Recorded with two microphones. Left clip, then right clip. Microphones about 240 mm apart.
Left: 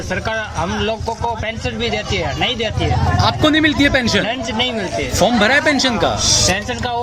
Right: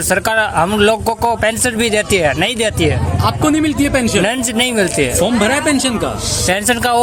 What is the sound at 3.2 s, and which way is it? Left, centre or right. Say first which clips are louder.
A man's voice: even; centre.